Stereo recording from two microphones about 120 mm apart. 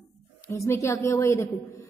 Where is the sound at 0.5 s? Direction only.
25° left (ahead or behind).